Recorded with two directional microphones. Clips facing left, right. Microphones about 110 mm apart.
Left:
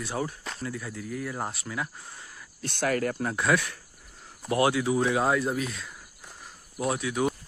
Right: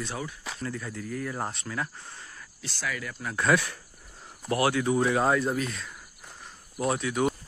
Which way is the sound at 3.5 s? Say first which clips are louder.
Right 1 dB; 5° left (ahead or behind).